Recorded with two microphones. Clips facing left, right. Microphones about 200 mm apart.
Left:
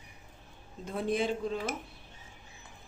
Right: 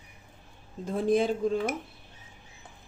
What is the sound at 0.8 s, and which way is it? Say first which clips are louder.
Speech: right 6 dB; 40° right (ahead or behind).